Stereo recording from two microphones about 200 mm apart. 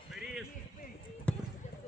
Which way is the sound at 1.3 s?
5° left (ahead or behind).